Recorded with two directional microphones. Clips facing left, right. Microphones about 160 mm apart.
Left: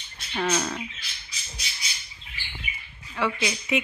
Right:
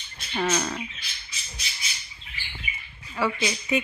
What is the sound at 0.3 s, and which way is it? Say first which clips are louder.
Speech: even; centre (ahead or behind).